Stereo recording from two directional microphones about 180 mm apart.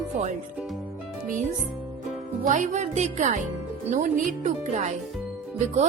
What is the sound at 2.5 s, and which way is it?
Speech, 40° right (ahead or behind).